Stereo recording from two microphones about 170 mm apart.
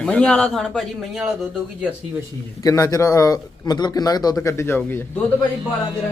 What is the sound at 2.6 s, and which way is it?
A man's voice, 20° left (ahead or behind).